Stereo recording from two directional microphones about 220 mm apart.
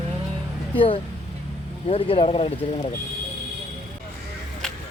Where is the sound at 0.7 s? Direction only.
25° left (ahead or behind).